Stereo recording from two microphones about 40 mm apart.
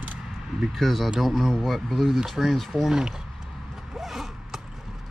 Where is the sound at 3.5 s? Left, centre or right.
Centre.